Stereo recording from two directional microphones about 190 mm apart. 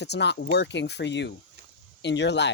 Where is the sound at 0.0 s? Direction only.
65° left (ahead or behind).